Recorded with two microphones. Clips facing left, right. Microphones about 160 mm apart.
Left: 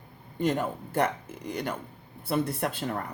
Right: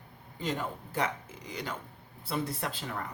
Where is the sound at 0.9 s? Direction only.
60° left (ahead or behind).